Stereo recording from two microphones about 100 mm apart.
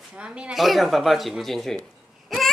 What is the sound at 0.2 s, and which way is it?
A child's voice, 10° right (ahead or behind).